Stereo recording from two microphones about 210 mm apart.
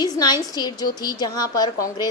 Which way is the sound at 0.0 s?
20° left (ahead or behind).